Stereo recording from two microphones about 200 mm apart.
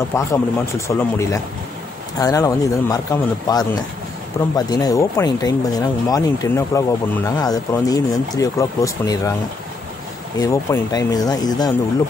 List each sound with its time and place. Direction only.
0.1 s speech: 15° left (ahead or behind)
10.3 s speech: 15° left (ahead or behind)